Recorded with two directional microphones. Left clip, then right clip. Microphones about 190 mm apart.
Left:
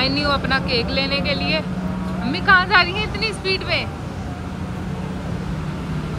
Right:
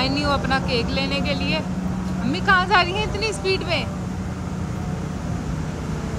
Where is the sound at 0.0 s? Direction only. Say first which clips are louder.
Left 2 dB; 15° right (ahead or behind).